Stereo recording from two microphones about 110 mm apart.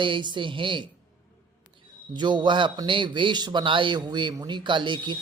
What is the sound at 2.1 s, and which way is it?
A man's voice, 45° right (ahead or behind).